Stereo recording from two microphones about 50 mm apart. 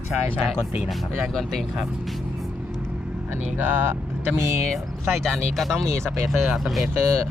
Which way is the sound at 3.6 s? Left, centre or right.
Right.